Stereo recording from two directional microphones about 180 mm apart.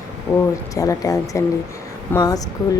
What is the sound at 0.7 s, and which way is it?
A woman's voice, 20° left (ahead or behind).